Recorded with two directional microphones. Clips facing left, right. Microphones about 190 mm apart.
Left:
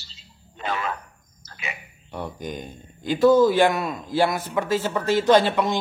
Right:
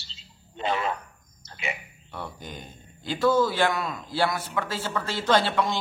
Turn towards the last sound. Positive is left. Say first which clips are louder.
# left 5 dB
turn(degrees=20)  # may be behind; listen again after turning